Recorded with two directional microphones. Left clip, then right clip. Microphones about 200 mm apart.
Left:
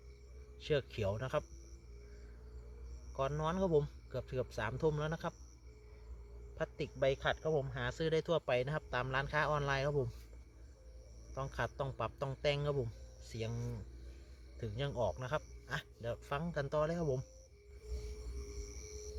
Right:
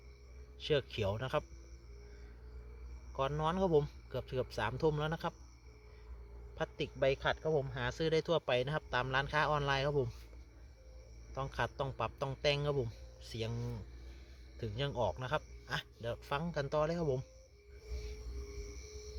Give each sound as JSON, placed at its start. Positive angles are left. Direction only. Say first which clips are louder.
{"t": 0.6, "sound": "a man's voice", "louder": "right 2 dB", "side_deg": -15}
{"t": 3.2, "sound": "a man's voice", "louder": "right 2 dB", "side_deg": -15}
{"t": 6.6, "sound": "a man's voice", "louder": "right 1 dB", "side_deg": -15}
{"t": 11.3, "sound": "a man's voice", "louder": "right 2 dB", "side_deg": -15}